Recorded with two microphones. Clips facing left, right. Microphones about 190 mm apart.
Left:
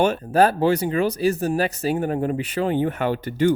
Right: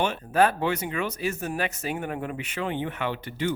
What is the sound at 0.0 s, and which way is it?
Speech, 40° left (ahead or behind).